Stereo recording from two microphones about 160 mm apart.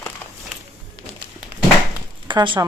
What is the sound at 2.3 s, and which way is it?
Speech, 30° right (ahead or behind).